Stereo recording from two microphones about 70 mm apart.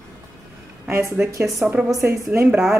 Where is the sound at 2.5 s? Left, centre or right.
Centre.